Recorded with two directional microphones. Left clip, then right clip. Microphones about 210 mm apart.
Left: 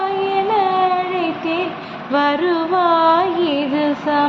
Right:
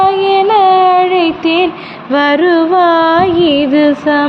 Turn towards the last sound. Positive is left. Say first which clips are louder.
# right 7 dB
turn(degrees=-35)  # may be behind; listen again after turning